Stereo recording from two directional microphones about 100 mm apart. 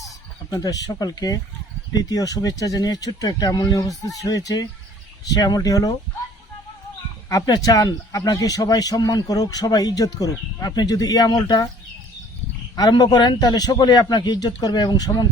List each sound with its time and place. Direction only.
0.5 s a man's voice: 40° left (ahead or behind)
7.3 s a man's voice: 40° left (ahead or behind)
12.7 s a man's voice: 45° left (ahead or behind)